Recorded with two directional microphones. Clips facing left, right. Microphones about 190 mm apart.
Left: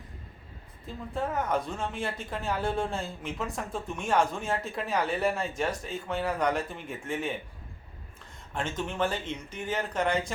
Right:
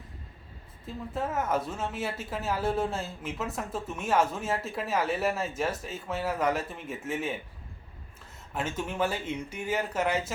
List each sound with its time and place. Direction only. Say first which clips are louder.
0.9 s speech: even; centre (ahead or behind)
8.5 s speech: even; 5° right (ahead or behind)